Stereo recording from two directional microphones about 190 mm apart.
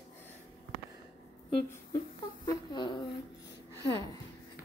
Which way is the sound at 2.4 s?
25° left (ahead or behind).